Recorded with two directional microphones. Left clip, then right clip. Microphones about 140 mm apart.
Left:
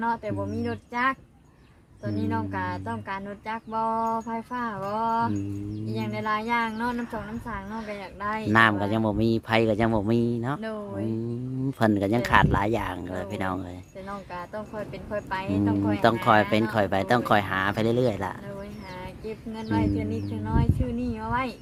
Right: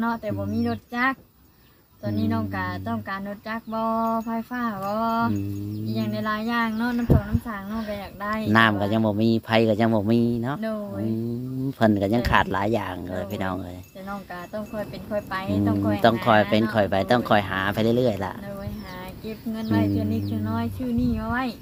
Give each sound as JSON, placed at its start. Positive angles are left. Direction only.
{"t": 0.0, "sound": "speech", "side_deg": 5}
{"t": 15.1, "sound": "speech", "side_deg": 0}
{"t": 19.5, "sound": "speech", "side_deg": 0}